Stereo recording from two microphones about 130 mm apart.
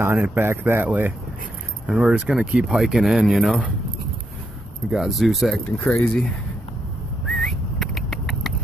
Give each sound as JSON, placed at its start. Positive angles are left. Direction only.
{"t": 0.0, "sound": "speech", "side_deg": -15}
{"t": 1.9, "sound": "speech", "side_deg": -5}
{"t": 4.8, "sound": "speech", "side_deg": 0}
{"t": 7.2, "sound": "a sound", "side_deg": 5}